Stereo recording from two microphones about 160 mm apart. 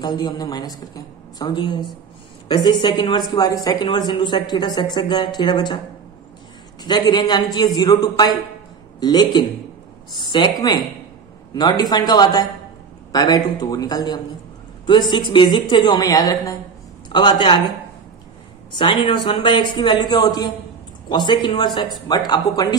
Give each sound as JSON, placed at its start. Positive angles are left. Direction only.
{"t": 0.0, "sound": "speech", "side_deg": 25}
{"t": 6.8, "sound": "speech", "side_deg": 25}
{"t": 18.8, "sound": "speech", "side_deg": 30}